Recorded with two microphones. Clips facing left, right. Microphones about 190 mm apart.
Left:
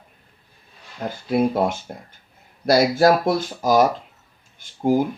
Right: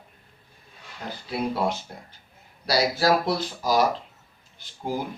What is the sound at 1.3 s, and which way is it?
Speech, 50° left (ahead or behind).